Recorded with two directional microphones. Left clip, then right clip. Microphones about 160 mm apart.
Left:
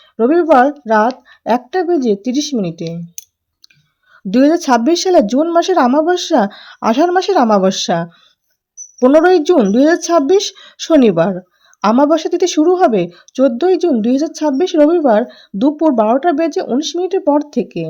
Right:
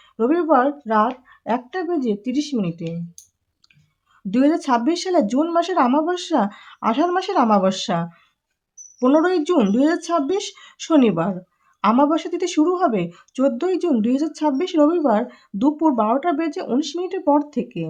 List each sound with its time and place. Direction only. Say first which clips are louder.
0.2 s speech: left 7 dB; 35° left (ahead or behind)
4.3 s speech: left 7 dB; 35° left (ahead or behind)